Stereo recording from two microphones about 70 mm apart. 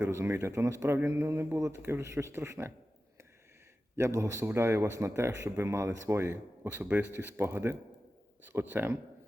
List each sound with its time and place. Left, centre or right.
0.0 s speech: right
3.9 s speech: right
6.7 s speech: right
7.1 s speech: right